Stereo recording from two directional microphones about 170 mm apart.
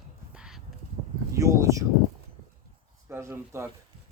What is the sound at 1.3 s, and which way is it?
Speech, 20° right (ahead or behind).